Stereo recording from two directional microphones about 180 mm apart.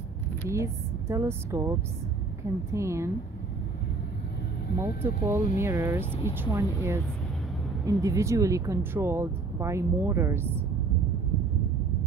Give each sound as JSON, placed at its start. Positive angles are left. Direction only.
{"t": 0.5, "sound": "speech", "side_deg": -15}
{"t": 4.7, "sound": "speech", "side_deg": -15}